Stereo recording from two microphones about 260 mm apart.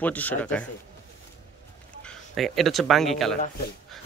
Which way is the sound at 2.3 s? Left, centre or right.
Centre.